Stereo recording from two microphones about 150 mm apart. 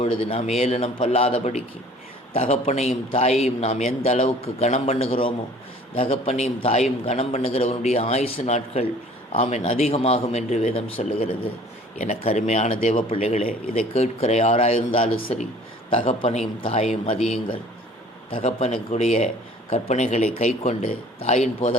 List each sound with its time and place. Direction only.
0.0 s a man's voice: 35° left (ahead or behind)
18.3 s a man's voice: 40° left (ahead or behind)